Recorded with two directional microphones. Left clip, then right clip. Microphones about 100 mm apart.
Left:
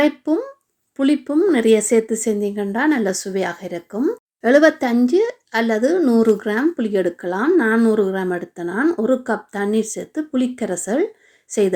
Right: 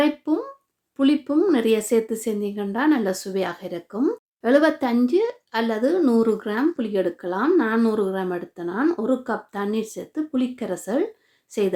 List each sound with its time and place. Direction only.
0.3 s speech: 30° left (ahead or behind)
1.6 s speech: 30° left (ahead or behind)
4.4 s speech: 30° left (ahead or behind)